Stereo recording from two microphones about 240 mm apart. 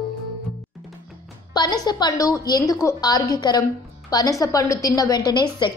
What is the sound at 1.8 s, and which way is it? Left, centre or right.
A woman's voice, centre.